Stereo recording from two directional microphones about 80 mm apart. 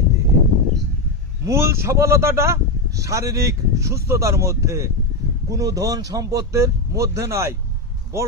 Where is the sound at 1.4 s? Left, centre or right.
Right.